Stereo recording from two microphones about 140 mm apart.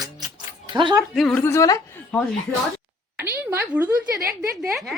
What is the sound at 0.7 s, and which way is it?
Speech, 30° right (ahead or behind).